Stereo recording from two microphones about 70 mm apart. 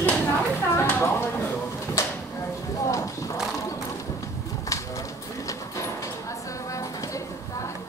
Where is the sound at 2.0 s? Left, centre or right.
Left.